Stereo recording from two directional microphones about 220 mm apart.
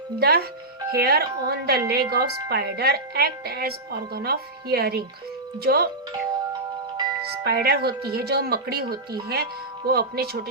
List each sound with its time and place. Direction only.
0.2 s speech: 45° right (ahead or behind)
7.4 s speech: 45° right (ahead or behind)